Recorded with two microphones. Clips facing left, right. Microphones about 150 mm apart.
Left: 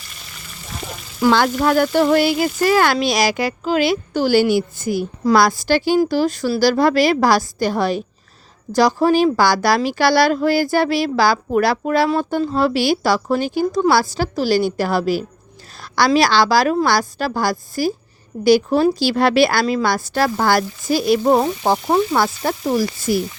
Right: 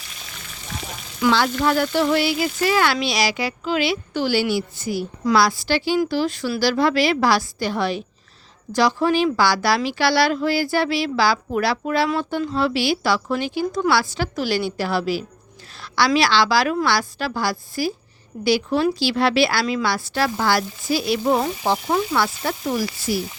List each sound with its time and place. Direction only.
0.1 s frying: centre (ahead or behind)
1.2 s a woman's voice: 50° left (ahead or behind)
12.0 s a woman's voice: 35° left (ahead or behind)
12.5 s a woman's voice: 45° left (ahead or behind)